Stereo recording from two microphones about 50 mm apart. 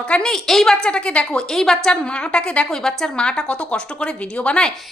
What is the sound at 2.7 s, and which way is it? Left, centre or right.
Speech, centre.